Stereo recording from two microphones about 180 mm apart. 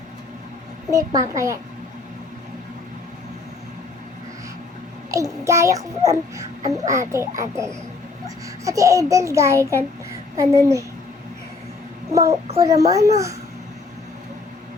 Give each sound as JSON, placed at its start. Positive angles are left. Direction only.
{"t": 0.9, "sound": "a woman's voice", "side_deg": -15}
{"t": 5.1, "sound": "a child's voice", "side_deg": -15}
{"t": 12.1, "sound": "a child's voice", "side_deg": -15}